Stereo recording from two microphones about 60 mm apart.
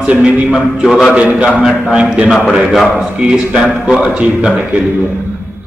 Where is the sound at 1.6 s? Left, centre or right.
Centre.